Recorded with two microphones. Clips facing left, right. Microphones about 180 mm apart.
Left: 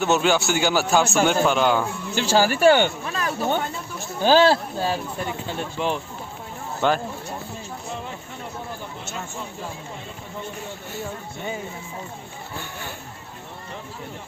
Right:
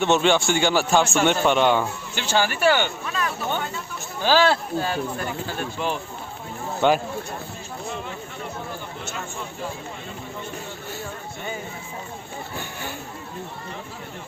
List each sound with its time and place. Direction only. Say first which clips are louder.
0.0 s speech: right 1 dB; 5° left (ahead or behind)
2.1 s speech: left 4 dB; 35° left (ahead or behind)
5.5 s speech: left 3 dB; 20° left (ahead or behind)
6.8 s speech: right 2 dB; centre (ahead or behind)